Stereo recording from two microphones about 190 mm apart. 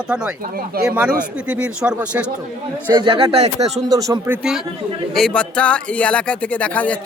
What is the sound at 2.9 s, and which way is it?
Speech, 25° right (ahead or behind).